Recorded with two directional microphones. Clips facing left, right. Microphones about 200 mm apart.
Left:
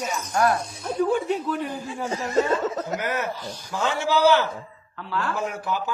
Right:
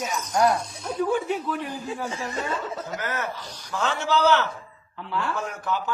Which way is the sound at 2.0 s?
40° left (ahead or behind).